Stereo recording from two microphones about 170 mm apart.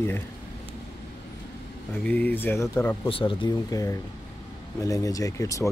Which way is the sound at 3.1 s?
30° left (ahead or behind).